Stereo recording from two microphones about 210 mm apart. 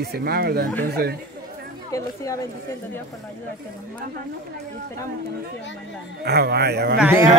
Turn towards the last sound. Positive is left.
turn(degrees=-10)  # may be behind; listen again after turning